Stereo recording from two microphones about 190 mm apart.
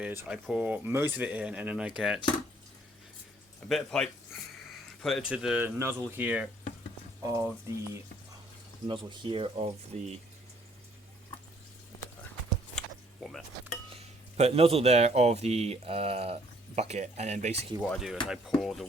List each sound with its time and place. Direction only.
0.0 s speech: 5° right (ahead or behind)
3.7 s speech: centre (ahead or behind); by 8.0 s 15° right (ahead or behind)
8.9 s speech: 25° right (ahead or behind)
12.7 s a sound: centre (ahead or behind)
13.9 s speech: 35° right (ahead or behind)
17.8 s speech: centre (ahead or behind)